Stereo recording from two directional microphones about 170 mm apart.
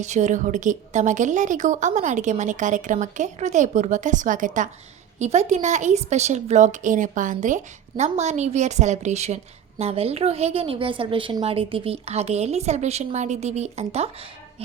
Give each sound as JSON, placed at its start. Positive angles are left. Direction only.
{"t": 0.0, "sound": "a woman's voice", "side_deg": -45}